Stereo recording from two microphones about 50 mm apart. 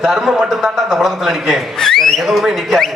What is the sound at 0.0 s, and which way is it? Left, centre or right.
A man's voice, centre.